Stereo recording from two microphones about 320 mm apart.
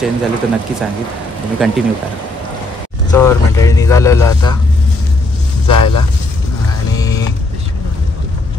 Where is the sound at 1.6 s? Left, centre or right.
Centre.